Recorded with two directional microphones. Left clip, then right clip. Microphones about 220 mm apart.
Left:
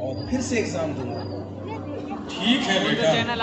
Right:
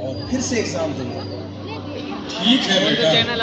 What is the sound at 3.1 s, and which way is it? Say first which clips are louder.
Speech: right 6 dB; 25° left (ahead or behind).